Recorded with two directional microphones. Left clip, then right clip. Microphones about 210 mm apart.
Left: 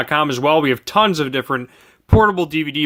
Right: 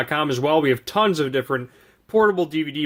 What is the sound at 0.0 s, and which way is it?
Speech, 30° left (ahead or behind).